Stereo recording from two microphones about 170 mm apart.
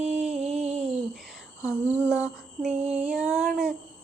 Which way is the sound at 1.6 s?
15° left (ahead or behind).